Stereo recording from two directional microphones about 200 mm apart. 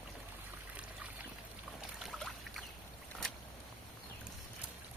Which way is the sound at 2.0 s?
Centre (ahead or behind).